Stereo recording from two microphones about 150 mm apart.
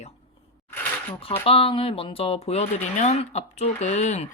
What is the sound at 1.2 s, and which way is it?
Speech, 40° left (ahead or behind).